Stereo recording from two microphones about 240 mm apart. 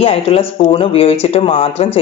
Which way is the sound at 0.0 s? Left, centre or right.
Left.